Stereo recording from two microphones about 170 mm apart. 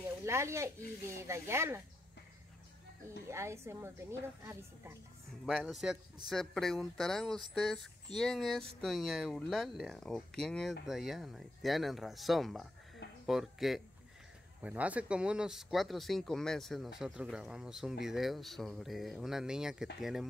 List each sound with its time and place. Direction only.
0.2 s speech: 15° right (ahead or behind)
3.3 s speech: 15° right (ahead or behind)
5.4 s speech: centre (ahead or behind)